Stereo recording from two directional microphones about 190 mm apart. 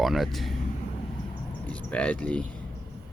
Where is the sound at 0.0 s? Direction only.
Centre (ahead or behind).